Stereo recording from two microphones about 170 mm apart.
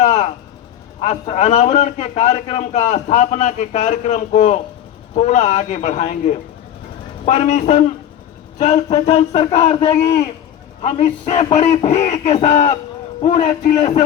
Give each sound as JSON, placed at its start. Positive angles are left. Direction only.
{"t": 0.0, "sound": "vehicle", "side_deg": 40}
{"t": 1.0, "sound": "a man's voice", "side_deg": 40}